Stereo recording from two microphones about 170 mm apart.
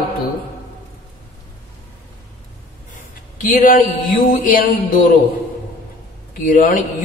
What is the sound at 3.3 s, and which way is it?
Speech, 50° left (ahead or behind).